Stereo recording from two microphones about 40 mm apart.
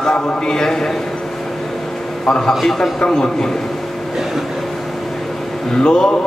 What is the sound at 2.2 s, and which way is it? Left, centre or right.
Speech, centre.